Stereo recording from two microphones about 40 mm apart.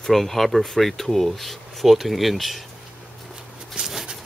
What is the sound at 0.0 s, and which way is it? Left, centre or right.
Speech, centre.